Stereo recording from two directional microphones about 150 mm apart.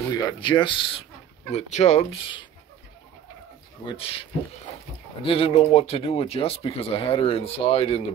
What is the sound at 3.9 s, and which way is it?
Speech, 40° left (ahead or behind).